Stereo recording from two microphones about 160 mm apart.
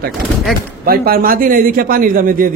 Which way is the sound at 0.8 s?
65° right (ahead or behind).